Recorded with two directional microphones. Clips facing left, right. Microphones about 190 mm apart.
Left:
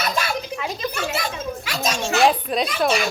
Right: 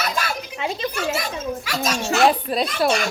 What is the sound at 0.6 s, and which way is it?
Speech, 25° right (ahead or behind).